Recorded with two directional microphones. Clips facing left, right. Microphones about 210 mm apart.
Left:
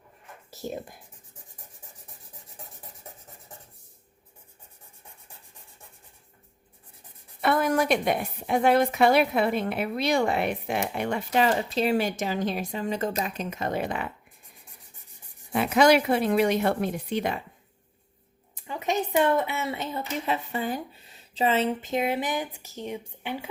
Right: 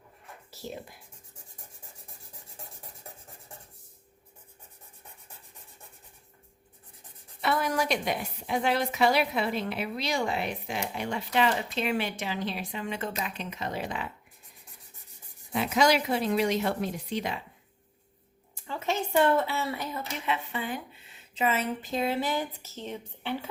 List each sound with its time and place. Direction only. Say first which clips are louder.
0.5 s speech: left 5 dB; 45° left (ahead or behind)
7.4 s a woman's voice: left 5 dB; 50° left (ahead or behind)
15.5 s speech: left 5 dB; 60° left (ahead or behind)
18.5 s a woman's voice: left 3 dB; 15° left (ahead or behind)
20.2 s a woman's voice: left 2 dB; 40° left (ahead or behind); by 23.5 s 10° left (ahead or behind)